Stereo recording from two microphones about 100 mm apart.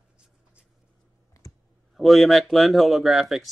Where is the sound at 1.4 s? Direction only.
35° left (ahead or behind).